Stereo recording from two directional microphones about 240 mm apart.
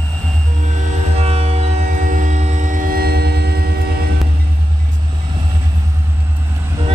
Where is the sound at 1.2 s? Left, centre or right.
Right.